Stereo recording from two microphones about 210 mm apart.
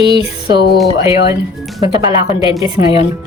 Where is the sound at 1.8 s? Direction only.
20° right (ahead or behind).